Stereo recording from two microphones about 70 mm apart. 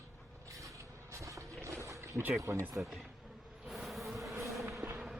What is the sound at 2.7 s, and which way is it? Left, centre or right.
Speech, centre.